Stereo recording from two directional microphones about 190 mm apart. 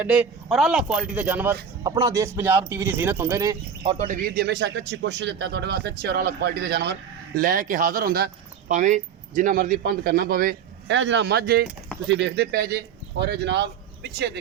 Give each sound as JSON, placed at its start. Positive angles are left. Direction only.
{"t": 0.0, "sound": "speech", "side_deg": -5}
{"t": 3.8, "sound": "speech", "side_deg": -40}
{"t": 7.3, "sound": "speech", "side_deg": -45}
{"t": 8.7, "sound": "speech", "side_deg": -40}
{"t": 10.8, "sound": "speech", "side_deg": -70}